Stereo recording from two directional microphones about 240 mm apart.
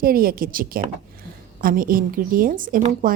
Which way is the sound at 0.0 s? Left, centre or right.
Right.